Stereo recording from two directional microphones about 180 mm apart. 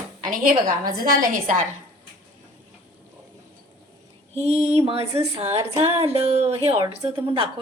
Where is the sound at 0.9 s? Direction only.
50° right (ahead or behind).